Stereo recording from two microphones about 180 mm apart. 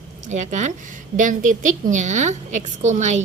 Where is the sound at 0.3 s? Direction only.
40° right (ahead or behind).